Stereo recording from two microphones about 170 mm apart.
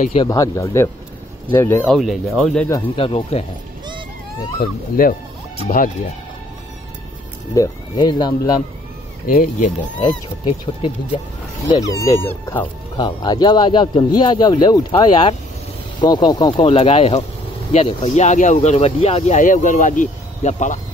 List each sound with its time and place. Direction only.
0.1 s speech: 25° left (ahead or behind)
1.9 s speech: centre (ahead or behind)
3.0 s speech: 35° left (ahead or behind)
4.6 s speech: 55° left (ahead or behind)
7.5 s speech: 20° left (ahead or behind)
9.3 s speech: 50° left (ahead or behind)
10.0 s speech: 25° left (ahead or behind)
12.9 s speech: 25° left (ahead or behind); by 20.8 s 45° left (ahead or behind)